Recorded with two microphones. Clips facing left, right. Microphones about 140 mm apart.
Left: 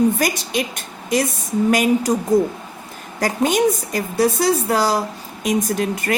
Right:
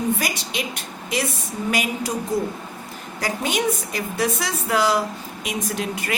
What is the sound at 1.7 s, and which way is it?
Speech, 45° left (ahead or behind).